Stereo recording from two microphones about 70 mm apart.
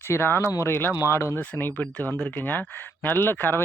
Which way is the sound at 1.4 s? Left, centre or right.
Left.